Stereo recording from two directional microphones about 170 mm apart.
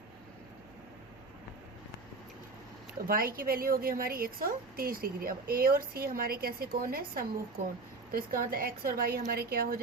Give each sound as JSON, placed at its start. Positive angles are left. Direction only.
{"t": 3.1, "sound": "a woman's voice", "side_deg": -55}